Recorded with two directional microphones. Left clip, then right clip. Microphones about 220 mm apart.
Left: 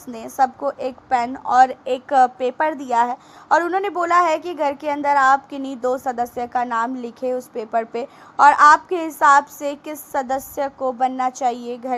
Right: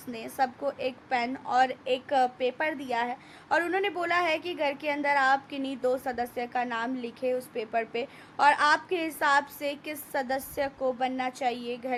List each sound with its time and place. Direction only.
0.3 s a woman's voice: 15° left (ahead or behind)